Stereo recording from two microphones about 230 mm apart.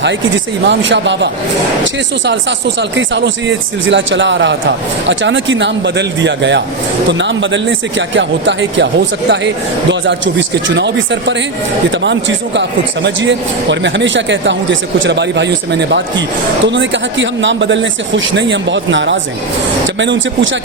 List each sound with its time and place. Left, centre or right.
0.0 s speech: right
10.8 s speech: right
12.5 s speech: right